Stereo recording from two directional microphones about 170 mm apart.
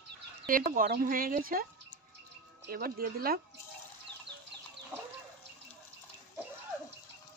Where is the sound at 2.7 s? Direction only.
60° right (ahead or behind).